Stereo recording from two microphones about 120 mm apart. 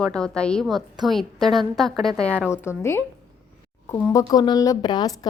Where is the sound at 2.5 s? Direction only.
20° left (ahead or behind).